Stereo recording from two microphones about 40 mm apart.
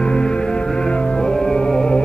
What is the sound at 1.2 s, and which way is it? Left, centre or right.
Music, centre.